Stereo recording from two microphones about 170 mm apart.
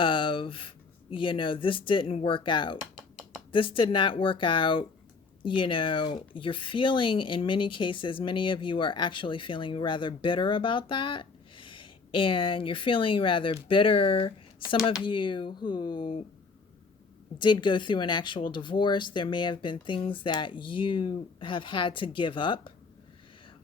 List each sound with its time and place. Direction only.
0.0 s speech: 30° left (ahead or behind)
2.9 s a sound: 5° right (ahead or behind)
3.5 s speech: 30° left (ahead or behind)
17.3 s speech: 25° left (ahead or behind)